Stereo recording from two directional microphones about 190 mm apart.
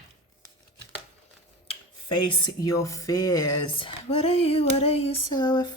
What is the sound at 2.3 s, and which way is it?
Speech, 20° left (ahead or behind).